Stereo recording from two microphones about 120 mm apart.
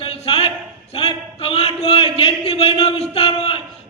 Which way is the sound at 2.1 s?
55° left (ahead or behind).